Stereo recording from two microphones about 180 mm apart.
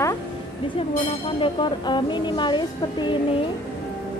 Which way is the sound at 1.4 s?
25° left (ahead or behind).